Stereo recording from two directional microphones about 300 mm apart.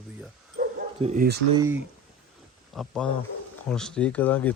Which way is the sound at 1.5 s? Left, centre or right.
Centre.